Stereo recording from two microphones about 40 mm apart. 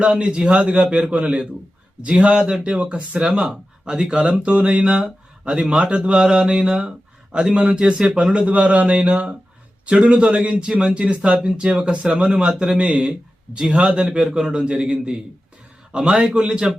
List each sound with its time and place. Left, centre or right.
0.0 s speech: right
1.0 s speech: centre
2.0 s speech: right